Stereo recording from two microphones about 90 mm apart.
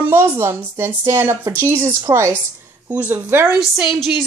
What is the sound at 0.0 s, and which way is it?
Speech, 25° right (ahead or behind).